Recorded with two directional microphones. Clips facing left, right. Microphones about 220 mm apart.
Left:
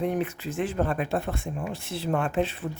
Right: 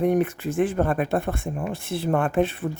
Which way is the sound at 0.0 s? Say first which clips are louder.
Right 6 dB; 50° right (ahead or behind).